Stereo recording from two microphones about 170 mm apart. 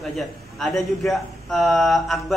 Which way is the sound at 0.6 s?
Centre (ahead or behind).